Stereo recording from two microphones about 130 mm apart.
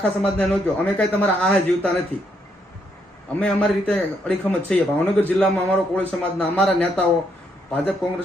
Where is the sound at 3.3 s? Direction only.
10° left (ahead or behind).